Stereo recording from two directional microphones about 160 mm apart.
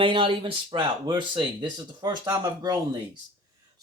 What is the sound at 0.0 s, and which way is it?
Speech, 35° right (ahead or behind).